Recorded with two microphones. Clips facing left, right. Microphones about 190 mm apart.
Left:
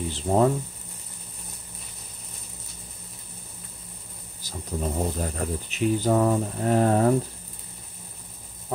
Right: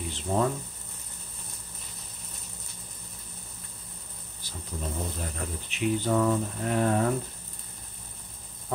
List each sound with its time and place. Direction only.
0.1 s speech: 40° left (ahead or behind)
4.4 s speech: 40° left (ahead or behind)